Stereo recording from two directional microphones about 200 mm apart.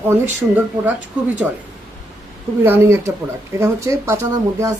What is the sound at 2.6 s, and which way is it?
Speech, 10° right (ahead or behind).